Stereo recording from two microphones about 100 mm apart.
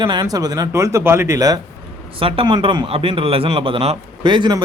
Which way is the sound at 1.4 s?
40° right (ahead or behind).